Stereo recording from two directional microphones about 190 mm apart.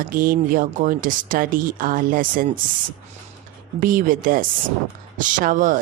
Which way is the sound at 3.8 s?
45° right (ahead or behind).